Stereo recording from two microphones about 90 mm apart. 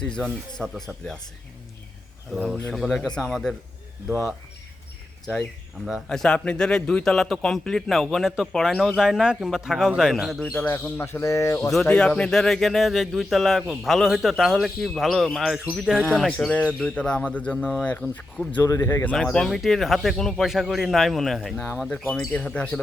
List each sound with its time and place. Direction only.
0.0 s a man's voice: 10° left (ahead or behind)
2.3 s a man's voice: centre (ahead or behind)
5.2 s a man's voice: 10° left (ahead or behind)
10.4 s speech: 15° left (ahead or behind); by 11.7 s 35° left (ahead or behind)
11.9 s a man's voice: 10° left (ahead or behind); by 16.0 s 5° right (ahead or behind)
16.5 s speech: 15° left (ahead or behind)
18.6 s speech: 35° left (ahead or behind)
19.1 s a man's voice: 5° left (ahead or behind)
21.8 s speech: 15° left (ahead or behind)